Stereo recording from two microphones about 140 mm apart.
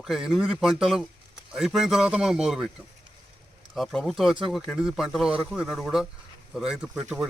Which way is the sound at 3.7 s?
Centre (ahead or behind).